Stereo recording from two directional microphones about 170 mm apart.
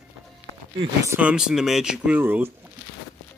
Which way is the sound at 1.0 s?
10° right (ahead or behind).